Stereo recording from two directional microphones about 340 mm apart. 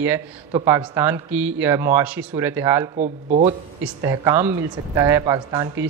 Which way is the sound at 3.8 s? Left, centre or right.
Centre.